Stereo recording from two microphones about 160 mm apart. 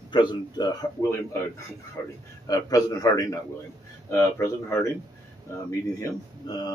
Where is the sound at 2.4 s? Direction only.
25° left (ahead or behind).